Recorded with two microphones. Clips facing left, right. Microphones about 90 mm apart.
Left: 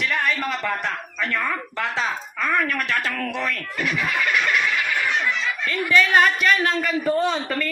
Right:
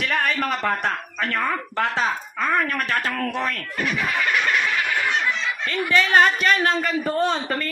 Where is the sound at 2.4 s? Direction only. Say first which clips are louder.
Even; 30° right (ahead or behind).